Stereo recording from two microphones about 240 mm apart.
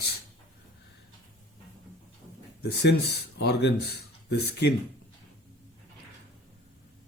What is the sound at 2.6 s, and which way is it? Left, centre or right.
Speech, left.